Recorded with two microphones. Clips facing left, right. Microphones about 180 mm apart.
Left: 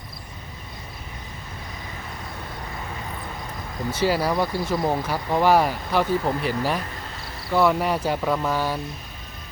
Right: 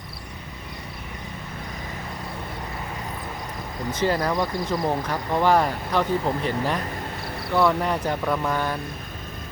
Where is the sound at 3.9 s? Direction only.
10° left (ahead or behind).